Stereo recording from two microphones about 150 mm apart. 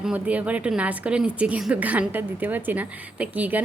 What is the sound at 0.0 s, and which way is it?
A woman's voice, 10° right (ahead or behind).